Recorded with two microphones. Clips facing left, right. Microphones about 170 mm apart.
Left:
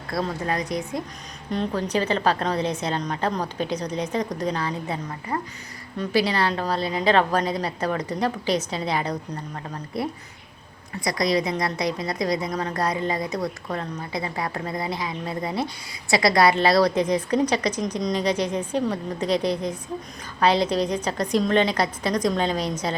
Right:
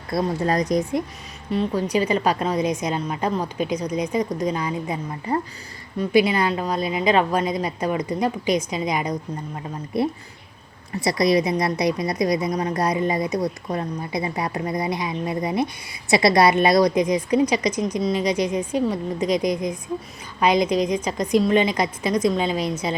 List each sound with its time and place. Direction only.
0.1 s a woman's voice: 20° right (ahead or behind)
0.4 s a woman's voice: 40° right (ahead or behind)
1.5 s a woman's voice: 5° right (ahead or behind)
6.0 s a woman's voice: 10° right (ahead or behind)